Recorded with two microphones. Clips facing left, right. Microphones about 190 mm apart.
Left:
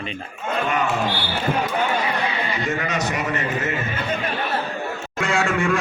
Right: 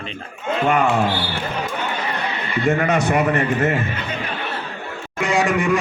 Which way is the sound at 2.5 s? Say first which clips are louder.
Right 6 dB; 55° right (ahead or behind).